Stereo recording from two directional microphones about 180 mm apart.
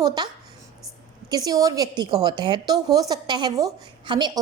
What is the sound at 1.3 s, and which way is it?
A woman's voice, 20° right (ahead or behind).